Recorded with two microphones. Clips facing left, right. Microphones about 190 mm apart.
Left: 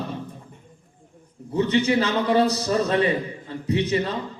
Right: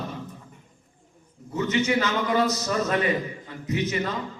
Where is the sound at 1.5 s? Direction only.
35° left (ahead or behind).